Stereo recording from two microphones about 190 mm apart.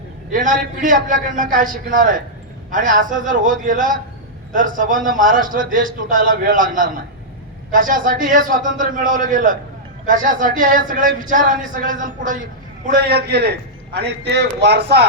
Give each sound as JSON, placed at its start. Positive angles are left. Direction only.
{"t": 0.3, "sound": "a man's voice", "side_deg": -45}